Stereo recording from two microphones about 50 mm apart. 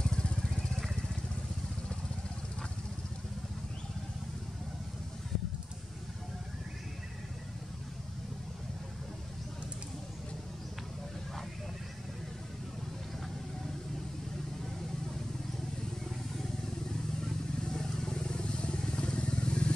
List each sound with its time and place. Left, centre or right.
0.0 s vehicle: centre
17.6 s vehicle: centre